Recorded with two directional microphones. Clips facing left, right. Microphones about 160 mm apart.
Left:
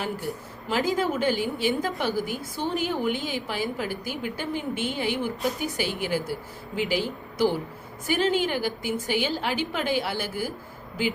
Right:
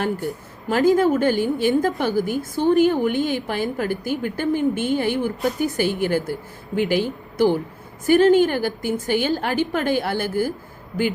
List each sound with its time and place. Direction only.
0.7 s a woman's voice: 50° right (ahead or behind)